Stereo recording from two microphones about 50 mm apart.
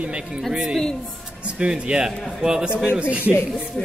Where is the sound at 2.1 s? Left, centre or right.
Centre.